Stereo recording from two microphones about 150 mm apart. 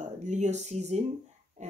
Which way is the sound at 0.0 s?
55° right (ahead or behind).